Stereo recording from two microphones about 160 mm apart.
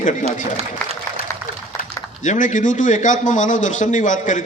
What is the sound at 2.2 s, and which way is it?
A man's voice, 50° left (ahead or behind).